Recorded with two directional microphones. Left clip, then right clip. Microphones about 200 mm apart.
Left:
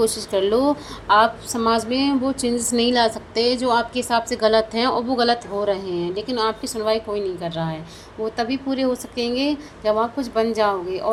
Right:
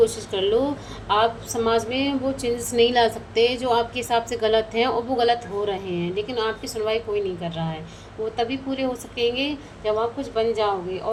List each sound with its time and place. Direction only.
0.0 s a woman's voice: 40° left (ahead or behind)
4.4 s a woman's voice: 10° left (ahead or behind)
4.9 s speech: 30° left (ahead or behind)